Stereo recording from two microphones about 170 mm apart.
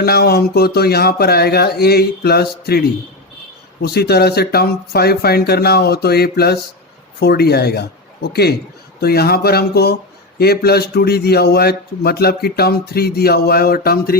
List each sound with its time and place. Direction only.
0.0 s speech: 65° left (ahead or behind)